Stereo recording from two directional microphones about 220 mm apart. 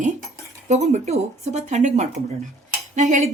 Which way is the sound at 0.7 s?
30° right (ahead or behind).